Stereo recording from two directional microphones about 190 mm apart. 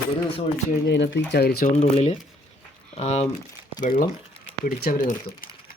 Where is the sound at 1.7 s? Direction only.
35° left (ahead or behind).